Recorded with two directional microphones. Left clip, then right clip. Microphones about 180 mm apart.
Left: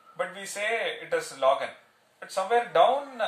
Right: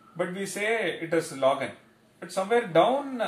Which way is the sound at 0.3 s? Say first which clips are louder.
Right 2 dB; 15° left (ahead or behind).